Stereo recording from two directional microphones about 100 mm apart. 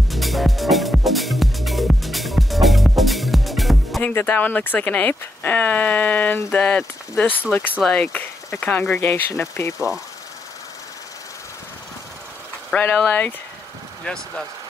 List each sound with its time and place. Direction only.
0.1 s music: centre (ahead or behind)
4.0 s speech: 20° left (ahead or behind)
9.1 s speech: 25° left (ahead or behind)
12.7 s speech: 15° left (ahead or behind)